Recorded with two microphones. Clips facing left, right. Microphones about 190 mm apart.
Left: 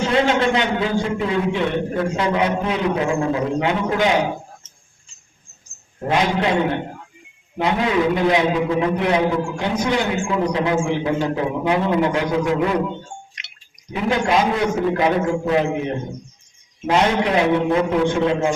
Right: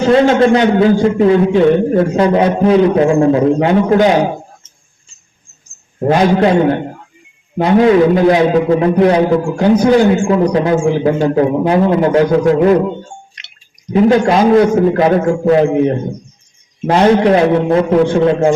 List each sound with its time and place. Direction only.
0.0 s a man's voice: 35° right (ahead or behind)
6.0 s a man's voice: 40° right (ahead or behind)
13.9 s a man's voice: 35° right (ahead or behind)
16.8 s a man's voice: 35° right (ahead or behind)